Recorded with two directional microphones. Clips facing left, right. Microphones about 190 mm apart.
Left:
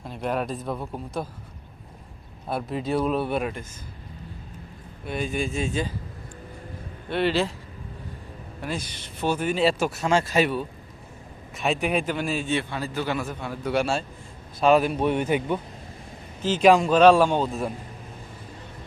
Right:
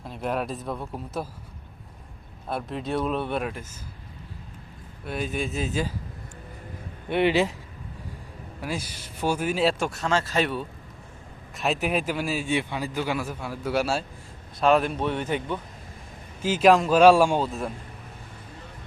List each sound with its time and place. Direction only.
0.0 s a man's voice: centre (ahead or behind)
2.5 s a man's voice: centre (ahead or behind)
5.0 s a man's voice: centre (ahead or behind)
7.1 s speech: 15° right (ahead or behind)
8.6 s a man's voice: 5° right (ahead or behind); by 15.6 s 10° left (ahead or behind)
16.4 s speech: 5° right (ahead or behind)